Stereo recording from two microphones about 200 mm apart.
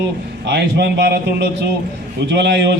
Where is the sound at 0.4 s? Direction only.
60° right (ahead or behind).